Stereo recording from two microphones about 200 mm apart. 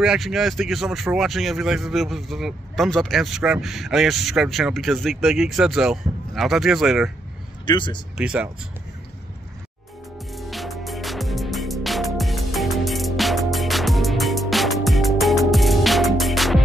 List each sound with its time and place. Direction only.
0.0 s speech: centre (ahead or behind)
7.6 s speech: 25° left (ahead or behind)
8.2 s speech: 5° right (ahead or behind)
10.3 s music: centre (ahead or behind)